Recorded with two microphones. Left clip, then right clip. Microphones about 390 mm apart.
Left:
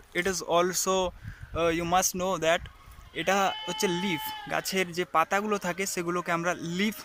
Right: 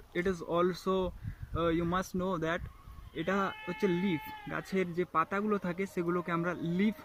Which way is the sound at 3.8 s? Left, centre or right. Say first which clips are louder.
Left 1 dB; left.